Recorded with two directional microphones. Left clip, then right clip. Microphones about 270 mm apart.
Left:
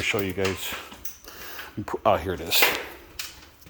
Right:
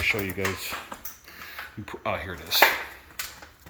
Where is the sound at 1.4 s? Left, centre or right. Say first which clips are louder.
Left 3 dB; left.